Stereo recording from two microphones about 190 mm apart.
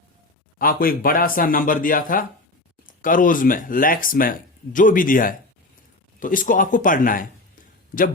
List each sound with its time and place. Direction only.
0.6 s speech: 50° left (ahead or behind)